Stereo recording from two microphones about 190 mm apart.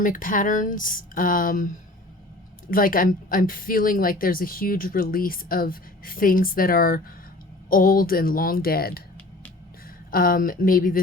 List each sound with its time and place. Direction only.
0.0 s speech: 45° left (ahead or behind)
10.1 s speech: 50° left (ahead or behind)